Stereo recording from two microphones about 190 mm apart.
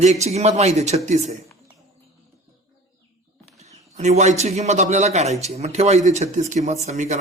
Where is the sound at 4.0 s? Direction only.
40° right (ahead or behind).